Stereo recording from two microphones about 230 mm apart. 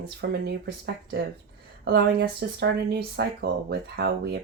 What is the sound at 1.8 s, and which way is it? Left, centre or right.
Speech, right.